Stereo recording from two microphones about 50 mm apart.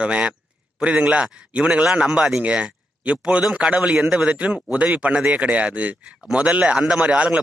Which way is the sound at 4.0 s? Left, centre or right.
Centre.